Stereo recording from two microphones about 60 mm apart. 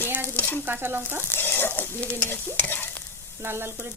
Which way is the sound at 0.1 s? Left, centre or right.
Right.